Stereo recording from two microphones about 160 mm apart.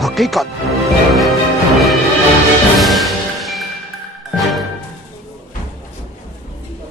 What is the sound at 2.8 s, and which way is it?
Music, centre (ahead or behind).